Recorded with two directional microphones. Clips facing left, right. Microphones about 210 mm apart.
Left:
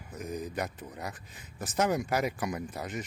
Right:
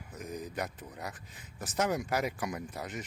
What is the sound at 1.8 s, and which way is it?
Speech, 20° left (ahead or behind).